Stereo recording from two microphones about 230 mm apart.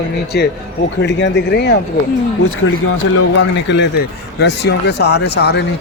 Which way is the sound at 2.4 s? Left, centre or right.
Left.